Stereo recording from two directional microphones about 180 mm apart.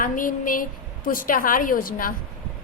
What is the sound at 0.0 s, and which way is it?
A woman's voice, 50° left (ahead or behind).